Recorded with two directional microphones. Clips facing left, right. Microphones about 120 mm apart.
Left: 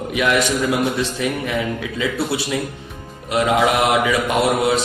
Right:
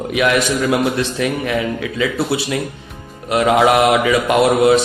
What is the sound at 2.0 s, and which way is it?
Speech, 80° right.